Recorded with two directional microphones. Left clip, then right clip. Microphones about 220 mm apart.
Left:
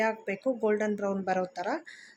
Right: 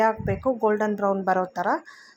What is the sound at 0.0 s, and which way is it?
Speech, 5° right (ahead or behind).